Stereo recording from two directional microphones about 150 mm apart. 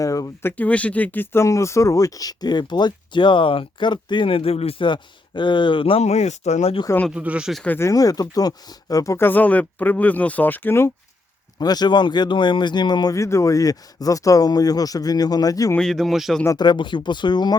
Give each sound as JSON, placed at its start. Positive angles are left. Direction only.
{"t": 0.0, "sound": "speech", "side_deg": 20}
{"t": 0.5, "sound": "speech", "side_deg": 10}
{"t": 6.8, "sound": "speech", "side_deg": 15}
{"t": 7.1, "sound": "speech", "side_deg": -10}
{"t": 7.6, "sound": "speech", "side_deg": 15}
{"t": 11.6, "sound": "speech", "side_deg": 25}
{"t": 15.7, "sound": "speech", "side_deg": 5}
{"t": 16.6, "sound": "speech", "side_deg": 30}